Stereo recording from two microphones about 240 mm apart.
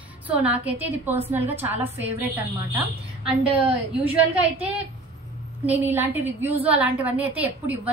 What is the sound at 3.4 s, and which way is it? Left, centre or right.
Speech, centre.